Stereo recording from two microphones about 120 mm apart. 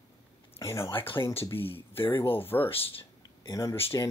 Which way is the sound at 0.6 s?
25° left (ahead or behind).